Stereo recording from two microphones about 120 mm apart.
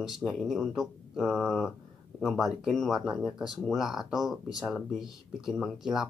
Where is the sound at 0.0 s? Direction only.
Centre (ahead or behind).